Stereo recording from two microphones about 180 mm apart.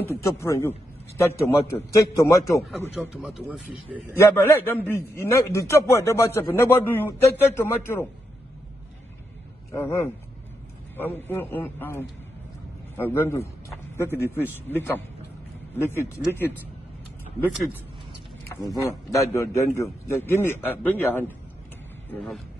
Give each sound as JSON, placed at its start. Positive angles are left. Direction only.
{"t": 0.4, "sound": "a man's voice", "side_deg": 15}
{"t": 2.9, "sound": "speech", "side_deg": -5}
{"t": 4.1, "sound": "a man's voice", "side_deg": 15}
{"t": 9.7, "sound": "a man's voice", "side_deg": 15}
{"t": 13.7, "sound": "a sound", "side_deg": 15}
{"t": 14.2, "sound": "a man's voice", "side_deg": 10}
{"t": 18.5, "sound": "a man's voice", "side_deg": 15}